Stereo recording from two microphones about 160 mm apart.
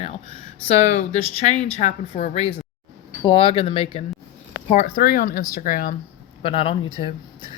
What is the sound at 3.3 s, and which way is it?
Speech, 30° left (ahead or behind).